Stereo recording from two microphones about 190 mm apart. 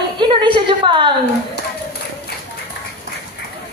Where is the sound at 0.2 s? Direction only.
25° right (ahead or behind).